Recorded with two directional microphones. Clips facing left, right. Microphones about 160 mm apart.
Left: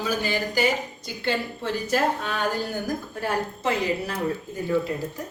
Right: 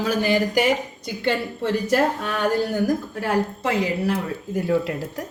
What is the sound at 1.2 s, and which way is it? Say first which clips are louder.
Speech: right 4 dB; 65° right (ahead or behind).